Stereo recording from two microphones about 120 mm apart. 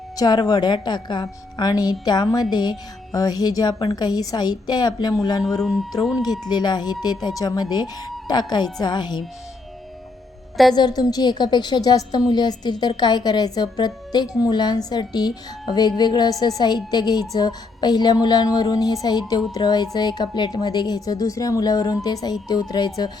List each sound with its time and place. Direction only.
0.2 s a woman's voice: 35° left (ahead or behind)
5.5 s speech: centre (ahead or behind)
6.5 s a woman's voice: 35° left (ahead or behind)
10.8 s a woman's voice: 35° left (ahead or behind)